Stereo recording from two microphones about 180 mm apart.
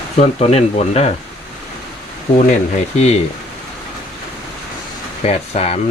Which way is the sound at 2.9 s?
35° left (ahead or behind).